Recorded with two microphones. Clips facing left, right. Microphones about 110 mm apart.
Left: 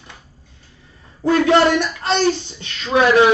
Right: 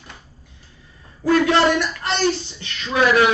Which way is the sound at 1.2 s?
25° left (ahead or behind).